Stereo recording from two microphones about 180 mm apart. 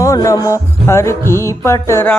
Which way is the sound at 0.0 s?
15° left (ahead or behind).